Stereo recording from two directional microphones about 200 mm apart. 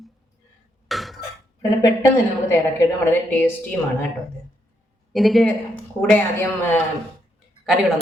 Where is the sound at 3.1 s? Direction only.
10° left (ahead or behind).